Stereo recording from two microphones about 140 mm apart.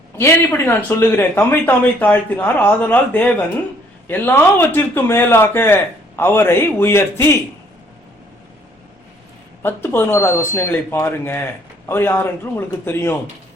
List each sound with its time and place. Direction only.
0.2 s a man's voice: 15° left (ahead or behind)
9.6 s a man's voice: 15° left (ahead or behind)